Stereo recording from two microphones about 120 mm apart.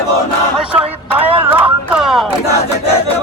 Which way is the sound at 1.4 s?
15° right (ahead or behind).